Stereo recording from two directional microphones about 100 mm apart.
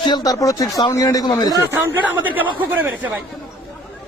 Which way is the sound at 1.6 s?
20° right (ahead or behind).